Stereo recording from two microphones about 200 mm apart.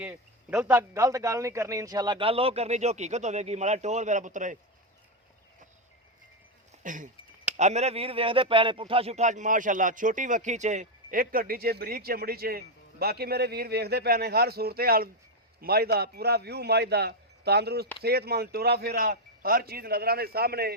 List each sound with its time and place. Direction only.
0.0 s speech: 5° right (ahead or behind); by 4.5 s 40° right (ahead or behind)
6.8 s speech: 40° right (ahead or behind)